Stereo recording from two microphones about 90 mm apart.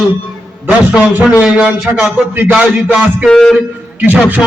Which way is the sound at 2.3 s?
15° right (ahead or behind).